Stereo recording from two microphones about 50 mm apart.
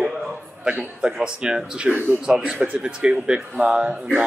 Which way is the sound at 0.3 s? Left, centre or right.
Right.